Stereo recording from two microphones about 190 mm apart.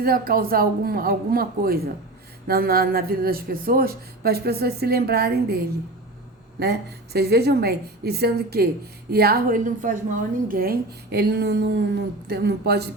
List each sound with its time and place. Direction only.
0.0 s a woman's voice: 50° right (ahead or behind)